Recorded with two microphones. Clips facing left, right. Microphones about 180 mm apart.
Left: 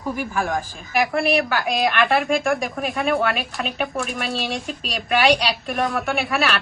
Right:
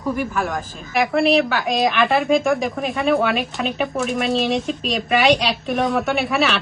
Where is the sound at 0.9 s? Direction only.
Centre (ahead or behind).